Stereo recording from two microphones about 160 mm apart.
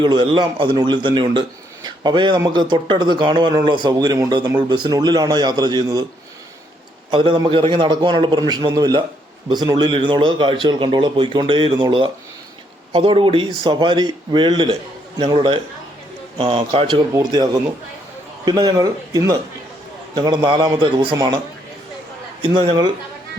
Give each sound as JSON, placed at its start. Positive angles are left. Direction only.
{"t": 0.0, "sound": "speech", "side_deg": -30}
{"t": 7.1, "sound": "a man's voice", "side_deg": -30}
{"t": 17.2, "sound": "speech", "side_deg": -25}
{"t": 18.6, "sound": "a man's voice", "side_deg": -25}